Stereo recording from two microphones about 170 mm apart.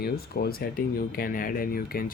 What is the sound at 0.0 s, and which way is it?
Speech, 65° left (ahead or behind).